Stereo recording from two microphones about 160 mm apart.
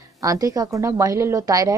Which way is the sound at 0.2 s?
20° right (ahead or behind).